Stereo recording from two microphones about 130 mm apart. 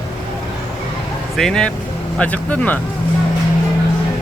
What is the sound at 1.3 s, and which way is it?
Speech, 5° left (ahead or behind).